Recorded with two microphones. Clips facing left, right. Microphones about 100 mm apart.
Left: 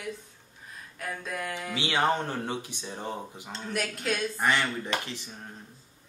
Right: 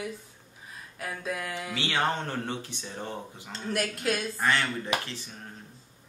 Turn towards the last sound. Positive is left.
turn(degrees=15)  # may be behind; listen again after turning